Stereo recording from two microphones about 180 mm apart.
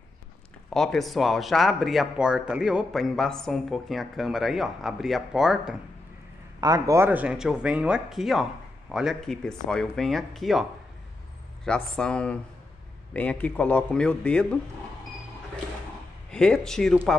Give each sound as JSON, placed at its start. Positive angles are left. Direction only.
{"t": 0.7, "sound": "speech", "side_deg": 5}
{"t": 6.6, "sound": "a man's voice", "side_deg": -20}
{"t": 16.3, "sound": "speech", "side_deg": 5}